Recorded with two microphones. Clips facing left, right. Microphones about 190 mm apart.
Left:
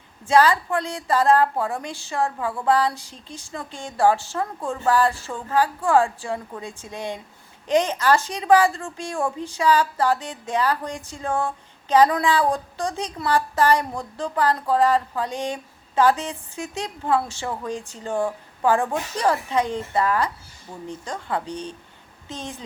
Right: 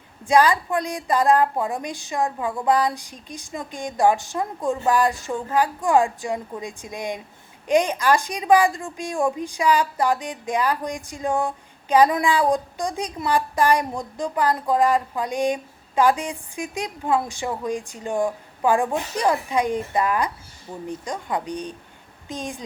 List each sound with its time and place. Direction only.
0.3 s a woman's voice: 15° right (ahead or behind)